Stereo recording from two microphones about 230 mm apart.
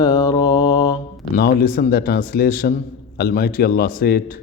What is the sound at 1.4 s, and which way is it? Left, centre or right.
A man's voice, left.